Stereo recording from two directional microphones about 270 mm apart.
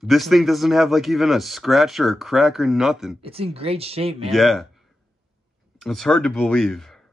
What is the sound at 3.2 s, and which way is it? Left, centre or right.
Speech, right.